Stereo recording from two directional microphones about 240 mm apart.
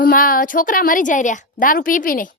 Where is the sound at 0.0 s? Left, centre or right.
Left.